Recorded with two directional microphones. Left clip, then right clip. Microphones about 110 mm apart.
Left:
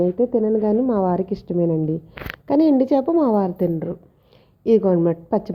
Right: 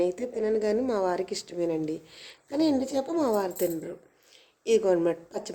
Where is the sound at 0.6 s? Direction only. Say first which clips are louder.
Left 7 dB; 35° left (ahead or behind).